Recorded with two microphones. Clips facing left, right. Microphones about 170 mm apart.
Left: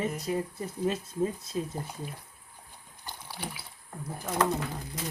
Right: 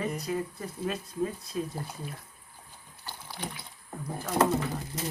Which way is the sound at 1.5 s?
25° left (ahead or behind).